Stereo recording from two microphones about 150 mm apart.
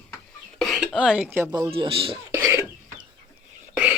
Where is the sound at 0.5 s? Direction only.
Centre (ahead or behind).